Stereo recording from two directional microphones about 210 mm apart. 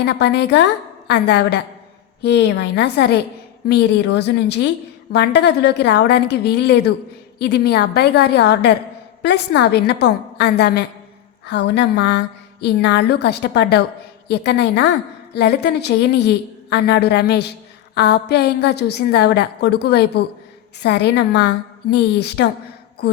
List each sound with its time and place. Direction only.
0.0 s a woman's voice: 55° left (ahead or behind)